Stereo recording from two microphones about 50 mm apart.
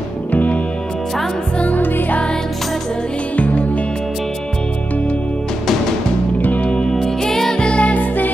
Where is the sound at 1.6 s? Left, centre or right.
Left.